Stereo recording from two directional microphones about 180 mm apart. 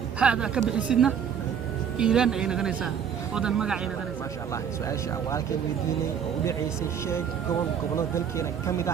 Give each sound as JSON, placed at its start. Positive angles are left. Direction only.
{"t": 0.2, "sound": "speech", "side_deg": -5}
{"t": 6.4, "sound": "speech", "side_deg": 15}
{"t": 7.9, "sound": "speech", "side_deg": 15}